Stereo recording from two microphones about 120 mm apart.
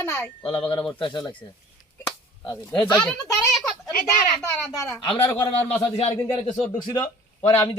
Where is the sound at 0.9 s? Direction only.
40° left (ahead or behind).